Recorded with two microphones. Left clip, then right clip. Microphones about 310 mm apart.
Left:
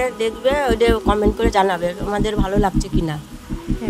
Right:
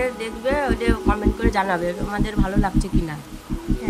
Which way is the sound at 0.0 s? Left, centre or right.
Centre.